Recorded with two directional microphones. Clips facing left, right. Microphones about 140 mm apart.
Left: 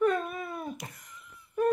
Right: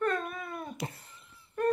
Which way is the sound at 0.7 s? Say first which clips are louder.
Right 5 dB; 30° right (ahead or behind).